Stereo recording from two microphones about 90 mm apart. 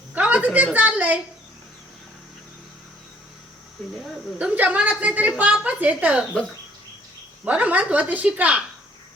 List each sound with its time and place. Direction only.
0.1 s a sound: 15° right (ahead or behind)
4.4 s a woman's voice: 15° right (ahead or behind)
7.4 s a woman's voice: 15° right (ahead or behind)